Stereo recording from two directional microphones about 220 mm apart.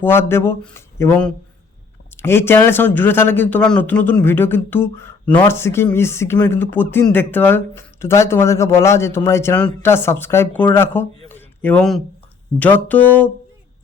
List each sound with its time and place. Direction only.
0.0 s speech: 10° left (ahead or behind)
11.3 s a sound: 10° left (ahead or behind)
12.5 s speech: 5° left (ahead or behind)